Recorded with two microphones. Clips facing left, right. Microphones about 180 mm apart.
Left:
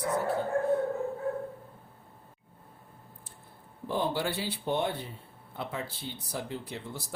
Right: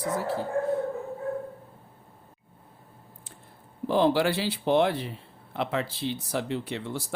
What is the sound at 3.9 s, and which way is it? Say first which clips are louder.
Speech: right 8 dB; 90° right.